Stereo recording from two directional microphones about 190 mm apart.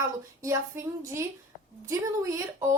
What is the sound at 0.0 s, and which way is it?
A woman's voice, 15° right (ahead or behind).